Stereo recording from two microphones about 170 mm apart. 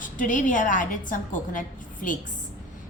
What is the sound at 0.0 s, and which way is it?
A woman's voice, 50° left (ahead or behind).